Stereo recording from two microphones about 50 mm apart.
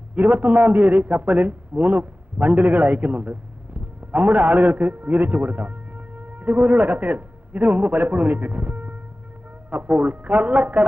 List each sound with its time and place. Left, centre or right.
0.1 s a man's voice: right